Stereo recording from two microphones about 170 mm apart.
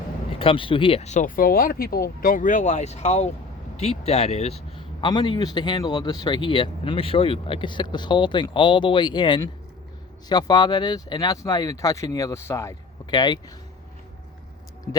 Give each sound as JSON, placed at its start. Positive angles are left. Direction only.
{"t": 0.3, "sound": "a man's voice", "side_deg": 30}
{"t": 14.9, "sound": "speech", "side_deg": 15}